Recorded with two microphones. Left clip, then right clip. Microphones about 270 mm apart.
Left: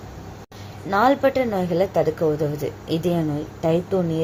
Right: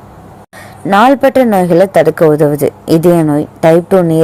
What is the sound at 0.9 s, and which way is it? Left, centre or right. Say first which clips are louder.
A woman's voice: right 11 dB; right.